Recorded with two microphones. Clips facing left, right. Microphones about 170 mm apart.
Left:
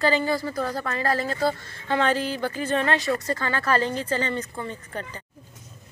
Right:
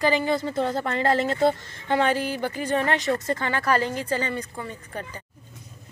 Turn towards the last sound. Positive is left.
turn(degrees=-10)  # may be behind; listen again after turning